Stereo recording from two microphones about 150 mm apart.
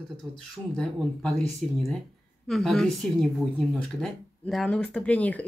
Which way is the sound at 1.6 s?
55° right (ahead or behind).